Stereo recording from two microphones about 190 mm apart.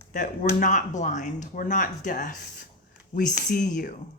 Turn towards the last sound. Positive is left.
turn(degrees=45)  # may be behind; listen again after turning